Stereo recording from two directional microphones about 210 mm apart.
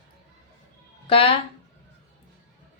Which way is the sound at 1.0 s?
25° left (ahead or behind).